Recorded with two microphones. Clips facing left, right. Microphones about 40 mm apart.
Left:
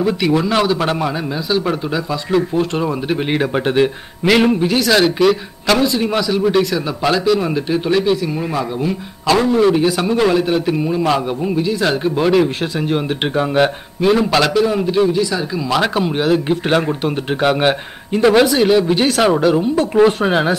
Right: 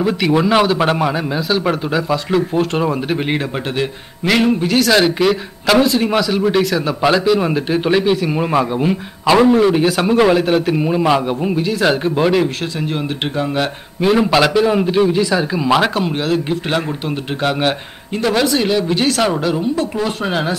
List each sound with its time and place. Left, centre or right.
0.0 s a man's voice: centre
3.3 s a man's voice: centre
8.4 s a man's voice: right
9.3 s a man's voice: centre
12.9 s speech: left
14.1 s a man's voice: centre
17.4 s speech: centre
19.7 s speech: left